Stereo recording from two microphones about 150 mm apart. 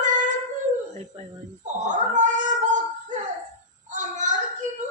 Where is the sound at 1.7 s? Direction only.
55° right (ahead or behind).